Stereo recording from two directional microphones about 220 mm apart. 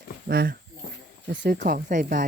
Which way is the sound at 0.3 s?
45° right (ahead or behind).